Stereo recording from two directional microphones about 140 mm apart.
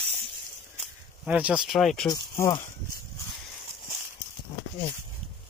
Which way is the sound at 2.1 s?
20° left (ahead or behind).